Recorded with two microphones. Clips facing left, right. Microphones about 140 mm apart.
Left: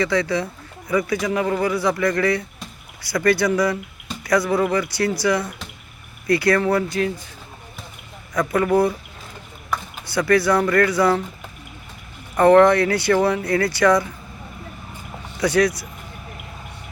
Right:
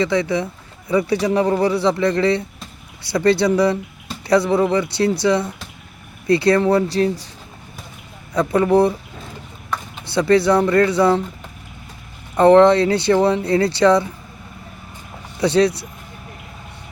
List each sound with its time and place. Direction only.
0.0 s speech: 20° right (ahead or behind)
8.4 s speech: 25° right (ahead or behind)
10.1 s speech: 25° right (ahead or behind)
12.4 s speech: 20° right (ahead or behind)
15.4 s speech: 25° right (ahead or behind)